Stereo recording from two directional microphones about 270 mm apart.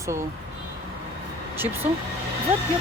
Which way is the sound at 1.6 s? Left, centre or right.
Centre.